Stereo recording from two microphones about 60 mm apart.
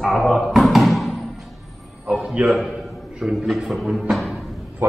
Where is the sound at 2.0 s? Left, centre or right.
Centre.